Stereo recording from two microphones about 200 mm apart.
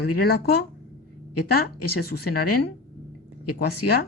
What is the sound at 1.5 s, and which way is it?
Speech, 50° left (ahead or behind).